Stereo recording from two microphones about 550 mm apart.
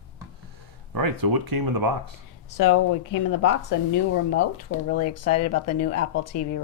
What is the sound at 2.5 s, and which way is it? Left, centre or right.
Speech, left.